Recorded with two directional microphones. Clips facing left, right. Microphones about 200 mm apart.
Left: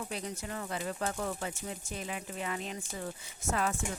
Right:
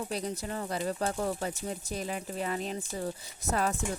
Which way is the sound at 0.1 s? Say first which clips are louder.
Right 4 dB; 35° right (ahead or behind).